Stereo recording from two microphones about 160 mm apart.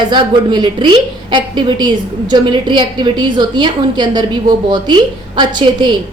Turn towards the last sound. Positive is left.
turn(degrees=-30)  # may be behind; listen again after turning